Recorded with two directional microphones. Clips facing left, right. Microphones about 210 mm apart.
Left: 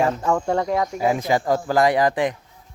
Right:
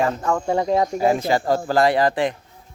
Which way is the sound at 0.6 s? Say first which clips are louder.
Right 3 dB; 25° right (ahead or behind).